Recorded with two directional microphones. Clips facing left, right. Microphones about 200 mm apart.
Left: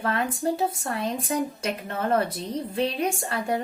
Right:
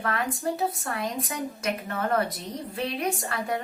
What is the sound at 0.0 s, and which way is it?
A woman's voice, 30° left (ahead or behind).